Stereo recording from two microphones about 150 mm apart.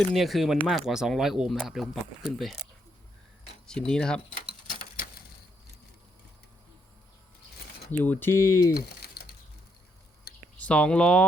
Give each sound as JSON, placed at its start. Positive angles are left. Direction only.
{"t": 0.1, "sound": "speech", "side_deg": 0}
{"t": 3.7, "sound": "speech", "side_deg": 5}
{"t": 7.9, "sound": "speech", "side_deg": 10}
{"t": 8.7, "sound": "typing", "side_deg": 90}
{"t": 10.3, "sound": "a sound", "side_deg": 90}
{"t": 10.6, "sound": "speech", "side_deg": 10}